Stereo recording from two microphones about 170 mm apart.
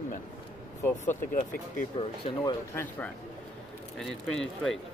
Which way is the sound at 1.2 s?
50° left (ahead or behind).